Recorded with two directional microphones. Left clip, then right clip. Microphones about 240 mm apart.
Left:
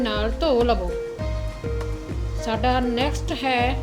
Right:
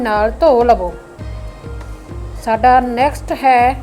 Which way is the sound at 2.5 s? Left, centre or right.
Centre.